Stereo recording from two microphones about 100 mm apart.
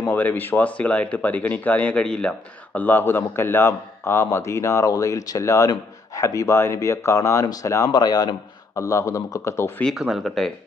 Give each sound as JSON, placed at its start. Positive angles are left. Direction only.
{"t": 0.0, "sound": "speech", "side_deg": 15}
{"t": 7.9, "sound": "speech", "side_deg": 45}
{"t": 9.9, "sound": "speech", "side_deg": 0}